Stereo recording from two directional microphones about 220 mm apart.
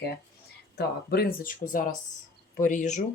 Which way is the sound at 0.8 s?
40° left (ahead or behind).